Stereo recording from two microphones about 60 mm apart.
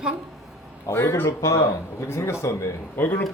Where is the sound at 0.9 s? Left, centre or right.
Left.